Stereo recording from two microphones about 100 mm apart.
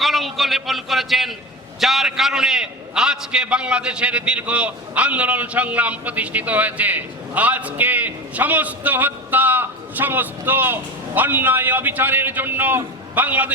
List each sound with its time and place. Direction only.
0.0 s a man's voice: centre (ahead or behind); by 13.5 s 15° right (ahead or behind)